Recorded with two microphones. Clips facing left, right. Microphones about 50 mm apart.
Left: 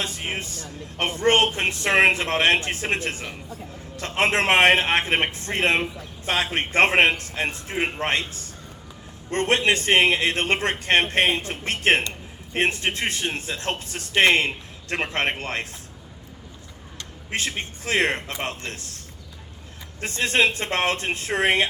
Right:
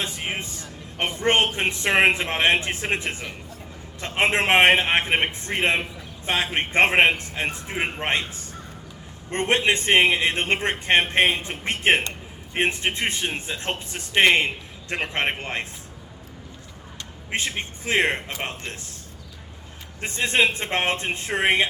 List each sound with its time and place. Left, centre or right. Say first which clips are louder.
0.0 s vehicle: even; right
1.2 s a man's voice: left 1 dB; right
17.3 s a man's voice: even; right
20.0 s a man's voice: even; right